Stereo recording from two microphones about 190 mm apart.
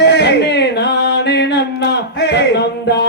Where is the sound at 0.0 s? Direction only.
65° left (ahead or behind).